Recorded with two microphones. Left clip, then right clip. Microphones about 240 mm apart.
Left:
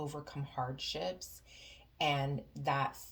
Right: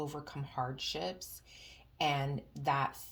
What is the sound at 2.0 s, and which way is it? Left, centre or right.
Speech, right.